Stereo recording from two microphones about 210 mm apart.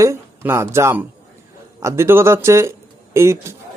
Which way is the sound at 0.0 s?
15° right (ahead or behind).